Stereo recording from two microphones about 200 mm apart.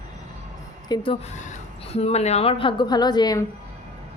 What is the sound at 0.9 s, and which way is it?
A woman's voice, 25° left (ahead or behind).